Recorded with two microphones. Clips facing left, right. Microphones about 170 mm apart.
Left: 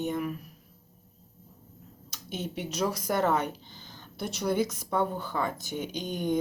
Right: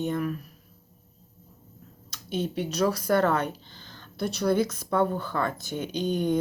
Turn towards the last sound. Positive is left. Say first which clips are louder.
# right 4 dB
turn(degrees=15)  # may be behind; listen again after turning